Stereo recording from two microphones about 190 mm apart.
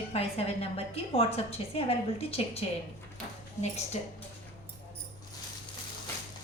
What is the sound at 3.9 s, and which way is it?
Speech, 35° left (ahead or behind).